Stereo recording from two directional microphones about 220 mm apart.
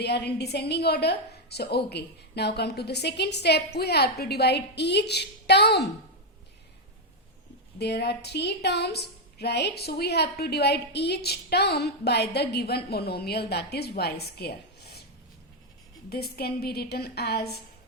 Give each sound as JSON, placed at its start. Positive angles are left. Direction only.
{"t": 0.0, "sound": "a woman's voice", "side_deg": 50}
{"t": 7.8, "sound": "a woman's voice", "side_deg": 50}
{"t": 16.0, "sound": "a woman's voice", "side_deg": 45}